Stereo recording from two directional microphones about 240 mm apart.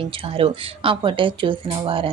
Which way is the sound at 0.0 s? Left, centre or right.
Right.